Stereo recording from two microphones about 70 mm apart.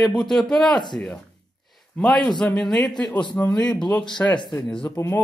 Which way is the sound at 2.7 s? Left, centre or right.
Centre.